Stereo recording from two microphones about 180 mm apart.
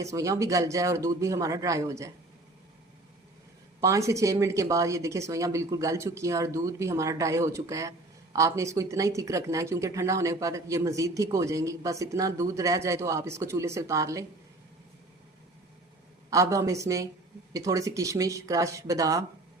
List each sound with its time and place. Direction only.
0.0 s speech: 15° right (ahead or behind)
3.8 s speech: 15° right (ahead or behind)
16.3 s speech: 15° right (ahead or behind)